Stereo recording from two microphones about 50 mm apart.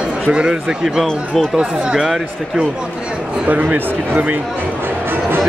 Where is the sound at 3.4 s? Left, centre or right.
Right.